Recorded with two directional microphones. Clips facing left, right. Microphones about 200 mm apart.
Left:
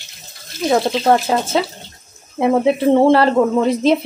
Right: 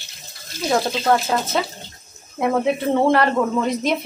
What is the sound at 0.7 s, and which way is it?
Speech, 30° left (ahead or behind).